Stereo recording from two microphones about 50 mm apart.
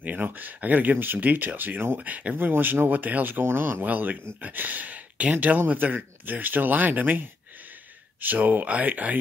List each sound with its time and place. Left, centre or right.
0.0 s speech: right
2.0 s speech: right
2.3 s speech: right
3.4 s speech: right
3.8 s speech: right